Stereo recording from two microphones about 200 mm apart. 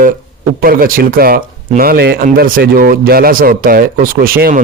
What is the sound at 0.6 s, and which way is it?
Speech, 45° right (ahead or behind).